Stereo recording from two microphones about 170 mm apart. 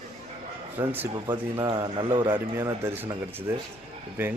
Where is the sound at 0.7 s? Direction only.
10° right (ahead or behind).